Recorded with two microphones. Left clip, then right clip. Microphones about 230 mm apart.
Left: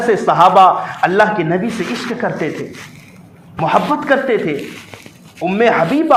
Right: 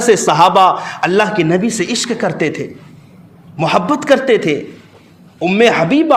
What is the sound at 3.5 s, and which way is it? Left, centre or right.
A man's voice, right.